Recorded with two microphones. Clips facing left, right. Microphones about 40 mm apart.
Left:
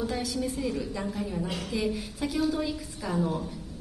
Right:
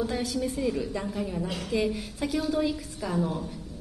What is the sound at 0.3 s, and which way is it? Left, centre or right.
A woman's voice, centre.